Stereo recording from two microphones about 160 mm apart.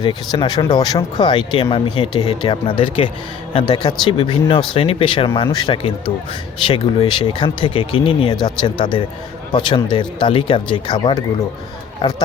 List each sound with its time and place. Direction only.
0.0 s speech: 30° left (ahead or behind)